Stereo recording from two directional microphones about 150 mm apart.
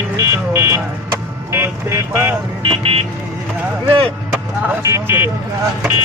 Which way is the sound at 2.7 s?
40° right (ahead or behind).